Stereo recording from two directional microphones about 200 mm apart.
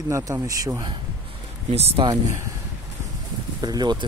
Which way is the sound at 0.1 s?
15° right (ahead or behind).